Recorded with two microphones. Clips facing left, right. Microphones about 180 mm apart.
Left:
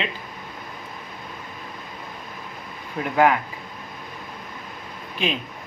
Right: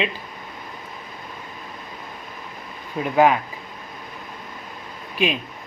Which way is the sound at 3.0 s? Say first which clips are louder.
Right 2 dB; 15° right (ahead or behind).